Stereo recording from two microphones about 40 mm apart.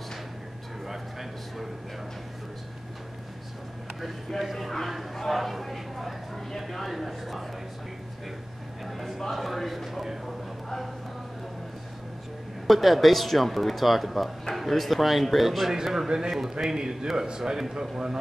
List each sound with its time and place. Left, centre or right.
4.4 s speech: centre
8.8 s a man's voice: centre
12.6 s speech: centre
15.7 s a man's voice: centre